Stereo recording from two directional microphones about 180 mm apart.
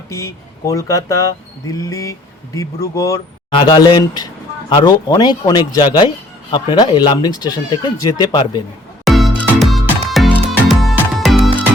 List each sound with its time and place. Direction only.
0.1 s speech: 15° left (ahead or behind)
9.0 s music: centre (ahead or behind)